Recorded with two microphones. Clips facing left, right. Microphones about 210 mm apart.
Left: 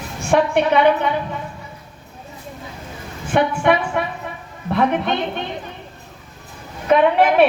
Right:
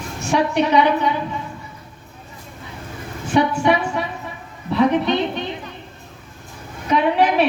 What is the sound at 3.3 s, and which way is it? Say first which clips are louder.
A woman's voice: even; 55° left (ahead or behind).